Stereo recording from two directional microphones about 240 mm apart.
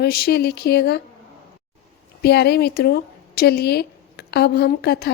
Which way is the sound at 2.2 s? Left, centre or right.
Left.